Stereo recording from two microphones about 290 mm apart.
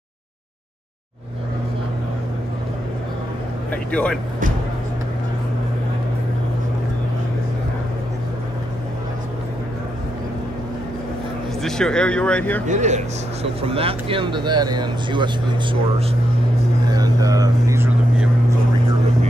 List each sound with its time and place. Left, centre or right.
3.7 s speech: centre
11.6 s speech: centre
12.6 s speech: right
16.8 s vehicle: centre